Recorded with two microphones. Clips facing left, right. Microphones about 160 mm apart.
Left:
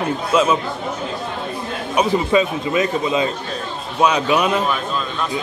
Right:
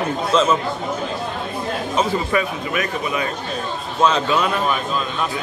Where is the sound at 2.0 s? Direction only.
20° left (ahead or behind).